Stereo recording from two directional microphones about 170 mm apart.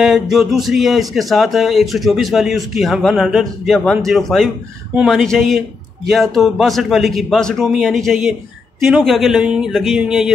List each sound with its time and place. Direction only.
0.0 s speech: centre (ahead or behind)